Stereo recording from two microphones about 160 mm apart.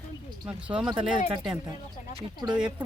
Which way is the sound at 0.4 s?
5° right (ahead or behind).